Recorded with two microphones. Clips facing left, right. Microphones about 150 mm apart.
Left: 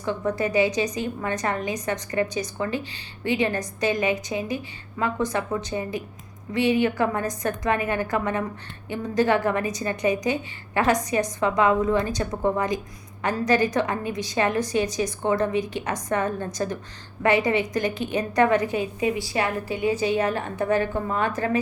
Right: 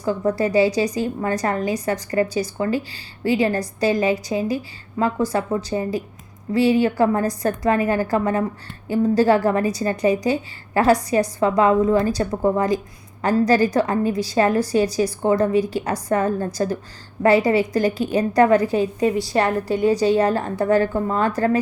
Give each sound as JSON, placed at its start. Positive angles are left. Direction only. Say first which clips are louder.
{"t": 0.0, "sound": "a woman's voice", "louder": "right 5 dB", "side_deg": -35}